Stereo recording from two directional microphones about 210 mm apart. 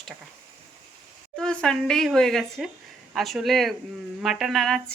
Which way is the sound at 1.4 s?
5° left (ahead or behind).